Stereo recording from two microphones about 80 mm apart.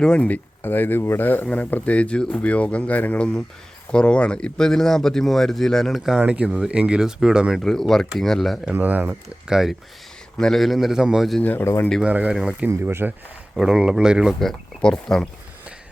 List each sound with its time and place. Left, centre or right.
0.0 s speech: centre
0.6 s speech: left; by 6.2 s centre
6.2 s speech: centre
7.6 s speech: centre
8.6 s speech: right
9.5 s speech: centre
11.4 s speech: left
12.0 s speech: centre
12.6 s speech: right
13.6 s speech: centre
14.3 s speech: centre